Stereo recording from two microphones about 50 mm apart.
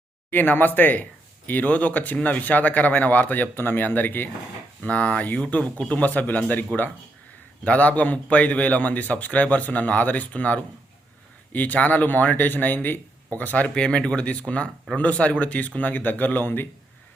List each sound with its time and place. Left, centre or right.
0.3 s a man's voice: left
4.8 s a man's voice: left
13.7 s a man's voice: centre; by 16.6 s left